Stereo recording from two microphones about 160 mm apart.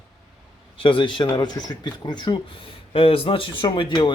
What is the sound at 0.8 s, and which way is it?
Speech, 30° left (ahead or behind).